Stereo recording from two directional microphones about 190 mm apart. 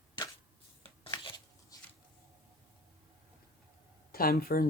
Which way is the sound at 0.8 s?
25° left (ahead or behind).